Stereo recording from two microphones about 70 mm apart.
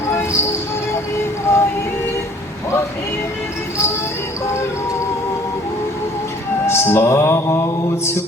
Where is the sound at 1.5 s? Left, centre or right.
Left.